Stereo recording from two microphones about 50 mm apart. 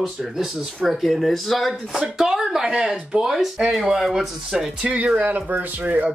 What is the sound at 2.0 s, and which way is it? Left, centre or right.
Speech, centre.